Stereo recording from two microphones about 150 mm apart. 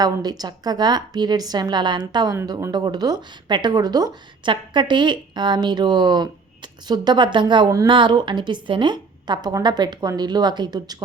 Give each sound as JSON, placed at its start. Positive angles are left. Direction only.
{"t": 0.0, "sound": "speech", "side_deg": -25}